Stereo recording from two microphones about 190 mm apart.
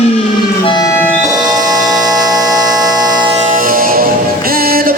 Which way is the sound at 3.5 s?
50° right (ahead or behind).